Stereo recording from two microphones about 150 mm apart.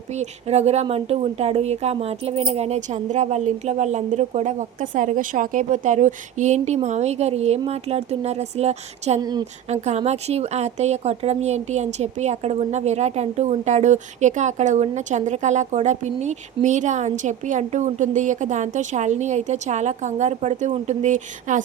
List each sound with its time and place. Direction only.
0.1 s speech: 45° right (ahead or behind)
9.2 s a woman's voice: 25° right (ahead or behind)
9.6 s speech: 50° right (ahead or behind)